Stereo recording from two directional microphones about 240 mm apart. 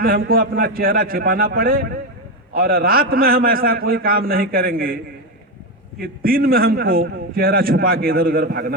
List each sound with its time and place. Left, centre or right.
0.3 s a man's voice: right
6.0 s a man's voice: right